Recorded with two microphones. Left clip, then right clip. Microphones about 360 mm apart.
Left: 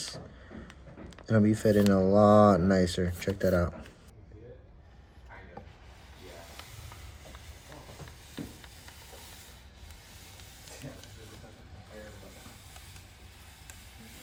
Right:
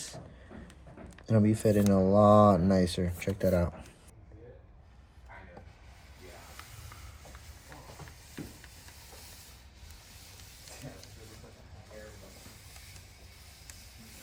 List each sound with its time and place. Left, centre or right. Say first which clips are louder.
1.3 s speech: left 2 dB; right